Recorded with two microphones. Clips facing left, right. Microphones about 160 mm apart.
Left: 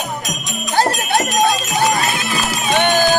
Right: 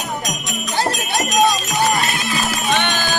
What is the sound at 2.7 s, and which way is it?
Run, 50° left (ahead or behind).